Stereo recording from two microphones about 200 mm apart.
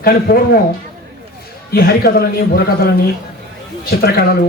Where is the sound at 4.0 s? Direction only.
50° left (ahead or behind).